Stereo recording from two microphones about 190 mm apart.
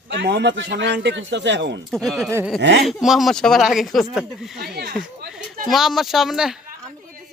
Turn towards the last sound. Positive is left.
turn(degrees=0)  # may be behind; listen again after turning